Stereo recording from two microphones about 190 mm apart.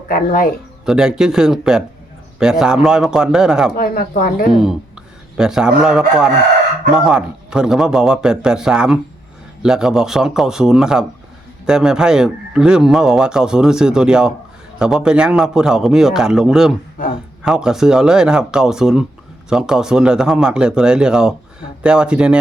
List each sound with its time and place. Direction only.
0.1 s speech: 50° left (ahead or behind)
0.9 s a man's voice: 5° right (ahead or behind)
3.8 s speech: 50° left (ahead or behind)
5.4 s a man's voice: 5° right (ahead or behind)